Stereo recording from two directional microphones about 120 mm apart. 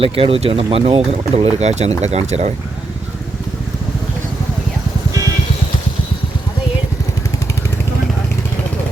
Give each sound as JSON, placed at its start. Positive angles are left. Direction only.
{"t": 0.0, "sound": "speech", "side_deg": -50}